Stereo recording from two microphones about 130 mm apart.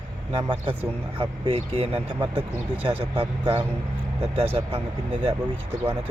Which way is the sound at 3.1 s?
40° right (ahead or behind).